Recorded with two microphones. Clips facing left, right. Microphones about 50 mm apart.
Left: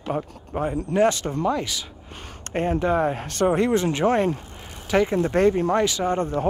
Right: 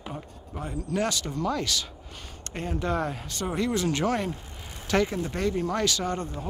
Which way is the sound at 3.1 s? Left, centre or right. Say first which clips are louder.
Left 10 dB; left.